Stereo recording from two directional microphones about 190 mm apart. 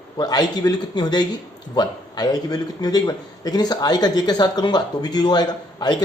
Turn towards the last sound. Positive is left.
turn(degrees=20)  # may be behind; listen again after turning